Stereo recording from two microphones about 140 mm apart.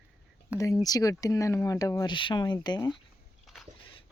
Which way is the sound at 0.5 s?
25° left (ahead or behind).